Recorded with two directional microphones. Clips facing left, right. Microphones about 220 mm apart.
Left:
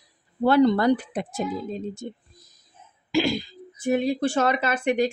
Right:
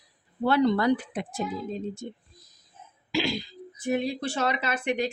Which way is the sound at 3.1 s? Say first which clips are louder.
Left 5 dB; 50° left (ahead or behind).